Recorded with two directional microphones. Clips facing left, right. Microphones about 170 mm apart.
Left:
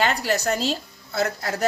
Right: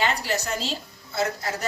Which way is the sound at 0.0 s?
45° left (ahead or behind).